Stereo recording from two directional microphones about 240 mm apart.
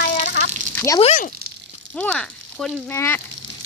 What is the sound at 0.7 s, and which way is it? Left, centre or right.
Speech, centre.